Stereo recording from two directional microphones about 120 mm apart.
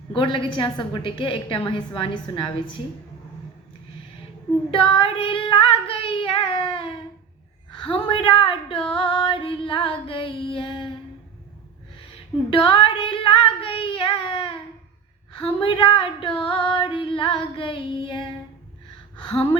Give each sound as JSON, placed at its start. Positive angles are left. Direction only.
{"t": 0.1, "sound": "female singing", "side_deg": 45}
{"t": 4.7, "sound": "child singing", "side_deg": 50}
{"t": 7.7, "sound": "female singing", "side_deg": 45}
{"t": 11.9, "sound": "female singing", "side_deg": 50}